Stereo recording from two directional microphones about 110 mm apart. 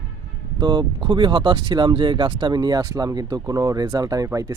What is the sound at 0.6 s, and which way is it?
Speech, 40° right (ahead or behind).